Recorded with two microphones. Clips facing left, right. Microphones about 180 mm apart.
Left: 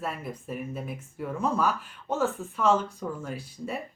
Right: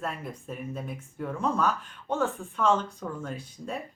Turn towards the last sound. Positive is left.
turn(degrees=10)  # may be behind; listen again after turning